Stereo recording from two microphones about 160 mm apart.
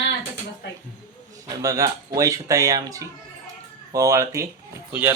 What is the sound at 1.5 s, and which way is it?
Speech, 20° right (ahead or behind).